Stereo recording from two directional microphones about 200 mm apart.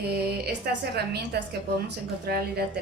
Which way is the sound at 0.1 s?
55° right (ahead or behind).